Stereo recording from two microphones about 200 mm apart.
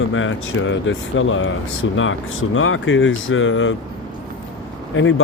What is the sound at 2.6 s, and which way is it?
Speech, 90° left.